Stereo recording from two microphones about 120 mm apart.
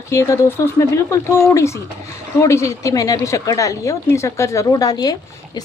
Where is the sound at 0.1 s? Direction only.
25° left (ahead or behind).